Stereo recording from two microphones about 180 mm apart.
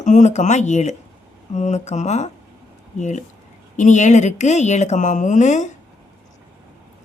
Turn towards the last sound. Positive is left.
turn(degrees=40)  # may be behind; listen again after turning